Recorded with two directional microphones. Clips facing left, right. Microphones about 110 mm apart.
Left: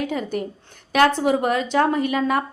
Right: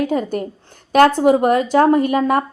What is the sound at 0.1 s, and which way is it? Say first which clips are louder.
A woman's voice: right 5 dB; 40° right (ahead or behind).